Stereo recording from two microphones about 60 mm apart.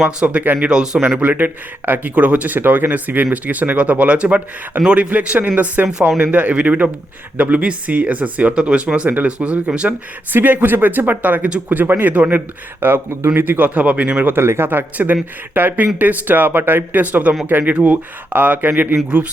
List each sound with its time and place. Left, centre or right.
0.2 s speech: centre
0.4 s speech: right
2.6 s speech: right; by 9.9 s centre
10.3 s speech: right
11.7 s speech: right
12.8 s speech: right
14.3 s speech: right